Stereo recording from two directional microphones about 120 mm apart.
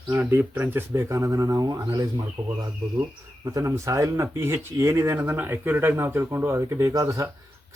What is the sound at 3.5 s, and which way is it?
Speech, 25° right (ahead or behind).